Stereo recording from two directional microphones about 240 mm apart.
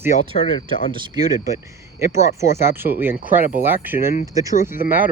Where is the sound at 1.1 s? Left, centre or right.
Centre.